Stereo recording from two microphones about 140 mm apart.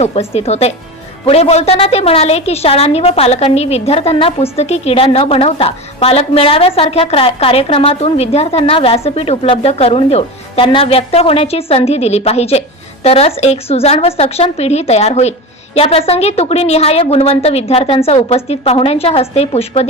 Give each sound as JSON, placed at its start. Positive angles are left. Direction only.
{"t": 0.0, "sound": "a woman's voice", "side_deg": 45}